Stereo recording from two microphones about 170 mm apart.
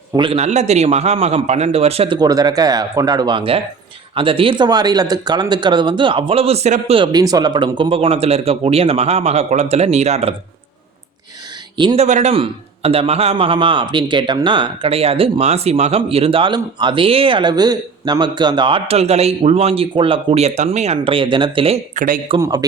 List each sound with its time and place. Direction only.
0.2 s a man's voice: 35° right (ahead or behind)
2.1 s a man's voice: 25° right (ahead or behind); by 10.3 s 40° right (ahead or behind)
11.8 s speech: 30° right (ahead or behind)
12.0 s a man's voice: 45° right (ahead or behind)
21.9 s a man's voice: 50° right (ahead or behind)
22.4 s speech: 20° right (ahead or behind)